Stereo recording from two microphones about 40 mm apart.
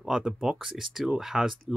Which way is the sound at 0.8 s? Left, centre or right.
Centre.